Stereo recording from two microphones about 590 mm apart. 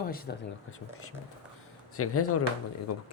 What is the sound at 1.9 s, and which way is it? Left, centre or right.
Speech, left.